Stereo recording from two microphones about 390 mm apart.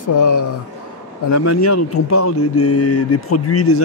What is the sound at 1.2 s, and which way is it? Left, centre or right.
Speech, left.